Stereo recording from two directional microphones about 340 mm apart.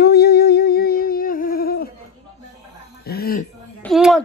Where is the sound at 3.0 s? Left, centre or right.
Left.